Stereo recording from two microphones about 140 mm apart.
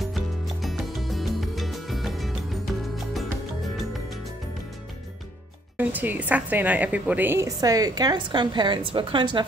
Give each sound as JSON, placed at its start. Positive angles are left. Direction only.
{"t": 0.0, "sound": "music", "side_deg": 0}
{"t": 3.6, "sound": "music", "side_deg": 0}
{"t": 5.8, "sound": "a woman's voice", "side_deg": -10}